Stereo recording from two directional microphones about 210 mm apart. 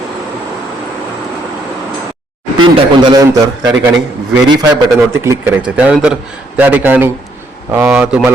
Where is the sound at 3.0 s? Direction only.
20° right (ahead or behind).